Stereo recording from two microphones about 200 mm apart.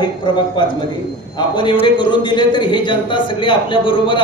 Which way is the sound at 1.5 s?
25° left (ahead or behind).